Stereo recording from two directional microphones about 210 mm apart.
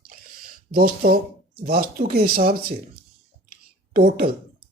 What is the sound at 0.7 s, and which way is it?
Speech, 45° right (ahead or behind).